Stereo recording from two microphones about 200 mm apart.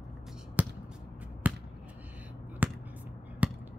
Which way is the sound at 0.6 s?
10° right (ahead or behind).